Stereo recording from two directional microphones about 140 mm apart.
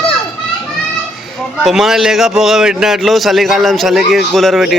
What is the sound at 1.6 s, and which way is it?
A man's voice, centre (ahead or behind).